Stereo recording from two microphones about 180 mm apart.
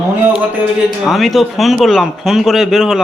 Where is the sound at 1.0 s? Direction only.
Centre (ahead or behind).